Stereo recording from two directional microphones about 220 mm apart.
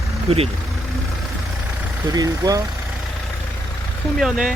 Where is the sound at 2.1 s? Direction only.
15° right (ahead or behind).